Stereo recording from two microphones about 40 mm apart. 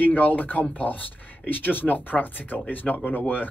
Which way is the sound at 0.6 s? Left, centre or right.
Left.